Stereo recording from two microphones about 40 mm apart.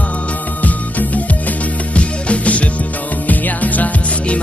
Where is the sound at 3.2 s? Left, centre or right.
Left.